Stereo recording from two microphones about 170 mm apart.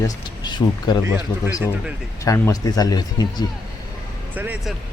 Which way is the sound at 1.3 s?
15° left (ahead or behind).